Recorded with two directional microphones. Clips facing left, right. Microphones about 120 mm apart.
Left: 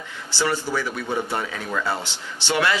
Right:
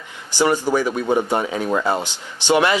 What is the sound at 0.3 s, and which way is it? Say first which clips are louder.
Speech: right 7 dB; 15° right (ahead or behind).